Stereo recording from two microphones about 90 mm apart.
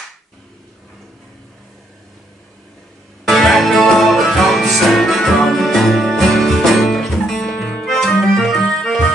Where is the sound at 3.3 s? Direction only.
Centre (ahead or behind).